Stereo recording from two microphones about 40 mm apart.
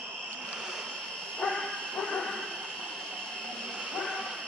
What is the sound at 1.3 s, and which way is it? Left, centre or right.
Bow-wow, left.